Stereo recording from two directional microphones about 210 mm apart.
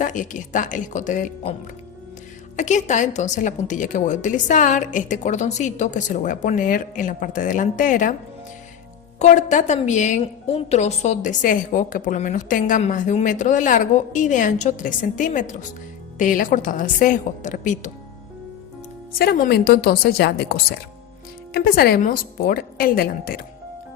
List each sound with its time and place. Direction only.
0.0 s a woman's voice: 40° left (ahead or behind)
2.6 s a woman's voice: 35° left (ahead or behind)
9.1 s a woman's voice: 35° left (ahead or behind)
19.2 s a woman's voice: 45° left (ahead or behind)